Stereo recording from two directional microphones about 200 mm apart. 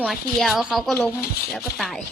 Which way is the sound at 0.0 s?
Centre (ahead or behind).